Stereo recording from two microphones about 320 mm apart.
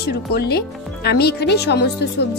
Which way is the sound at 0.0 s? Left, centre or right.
Left.